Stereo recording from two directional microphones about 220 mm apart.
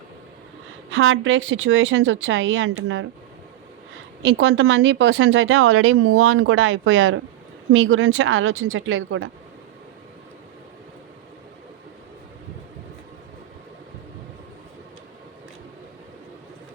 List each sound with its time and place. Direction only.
0.9 s speech: 60° right (ahead or behind)
4.2 s speech: 55° right (ahead or behind)